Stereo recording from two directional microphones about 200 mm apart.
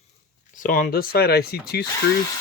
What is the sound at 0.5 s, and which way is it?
Speech, 45° left (ahead or behind).